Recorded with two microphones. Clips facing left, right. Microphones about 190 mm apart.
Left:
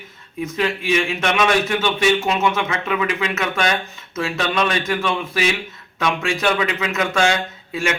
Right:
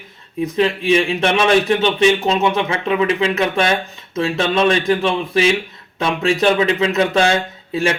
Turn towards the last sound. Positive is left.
turn(degrees=-30)  # may be behind; listen again after turning